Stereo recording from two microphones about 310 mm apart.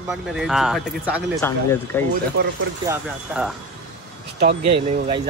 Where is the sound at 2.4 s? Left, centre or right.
Right.